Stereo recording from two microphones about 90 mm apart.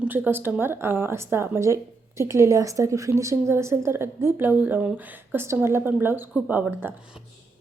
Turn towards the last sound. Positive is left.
turn(degrees=-20)  # may be behind; listen again after turning